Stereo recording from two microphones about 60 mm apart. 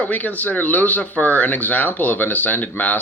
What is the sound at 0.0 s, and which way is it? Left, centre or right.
Speech, left.